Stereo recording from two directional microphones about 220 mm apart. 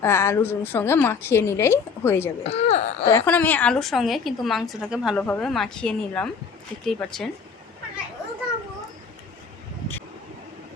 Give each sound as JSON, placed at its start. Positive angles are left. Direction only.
{"t": 0.0, "sound": "a woman's voice", "side_deg": 10}
{"t": 2.4, "sound": "speech", "side_deg": 30}
{"t": 3.1, "sound": "a woman's voice", "side_deg": 10}